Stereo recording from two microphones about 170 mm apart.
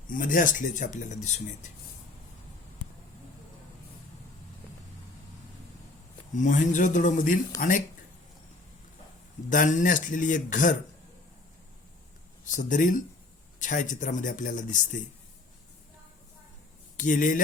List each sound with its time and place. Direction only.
0.1 s speech: 55° left (ahead or behind)
6.3 s speech: 45° left (ahead or behind)
9.5 s speech: 50° left (ahead or behind)
12.5 s speech: 50° left (ahead or behind)
17.0 s speech: 50° left (ahead or behind)